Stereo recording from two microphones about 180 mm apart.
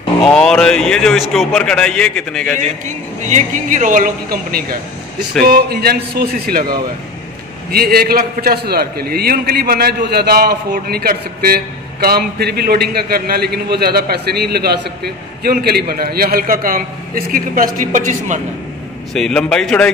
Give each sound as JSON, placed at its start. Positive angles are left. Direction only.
{"t": 0.2, "sound": "a man's voice", "side_deg": 5}
{"t": 3.2, "sound": "a man's voice", "side_deg": -40}
{"t": 7.7, "sound": "a man's voice", "side_deg": -55}
{"t": 19.1, "sound": "a man's voice", "side_deg": 5}